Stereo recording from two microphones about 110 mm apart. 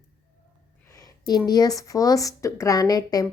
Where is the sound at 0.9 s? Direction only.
35° left (ahead or behind).